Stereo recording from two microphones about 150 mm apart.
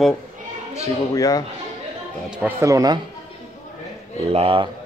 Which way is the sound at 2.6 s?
20° right (ahead or behind).